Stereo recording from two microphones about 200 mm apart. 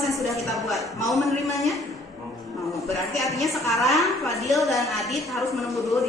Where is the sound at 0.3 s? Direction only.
Centre (ahead or behind).